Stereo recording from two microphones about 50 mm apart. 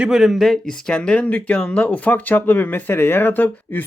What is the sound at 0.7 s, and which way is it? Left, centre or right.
Speech, centre.